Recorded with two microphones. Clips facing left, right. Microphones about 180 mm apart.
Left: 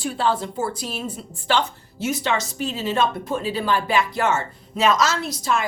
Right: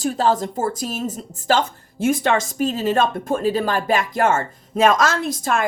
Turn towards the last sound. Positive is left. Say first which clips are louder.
# right 2 dB
turn(degrees=-50)  # may be behind; listen again after turning